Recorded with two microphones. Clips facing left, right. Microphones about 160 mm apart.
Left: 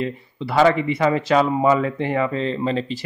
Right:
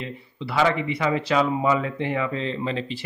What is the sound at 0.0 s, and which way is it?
Speech, 45° left (ahead or behind).